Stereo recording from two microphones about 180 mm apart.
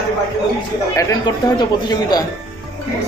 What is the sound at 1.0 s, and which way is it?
Speech, 20° left (ahead or behind).